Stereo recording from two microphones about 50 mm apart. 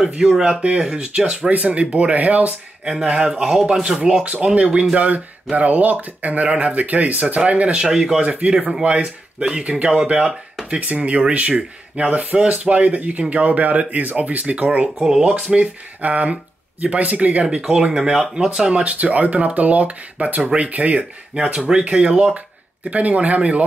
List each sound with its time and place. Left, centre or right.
0.0 s speech: centre
1.5 s speech: right
2.8 s speech: centre
4.2 s speech: right
7.8 s speech: centre
15.0 s speech: centre
15.5 s speech: right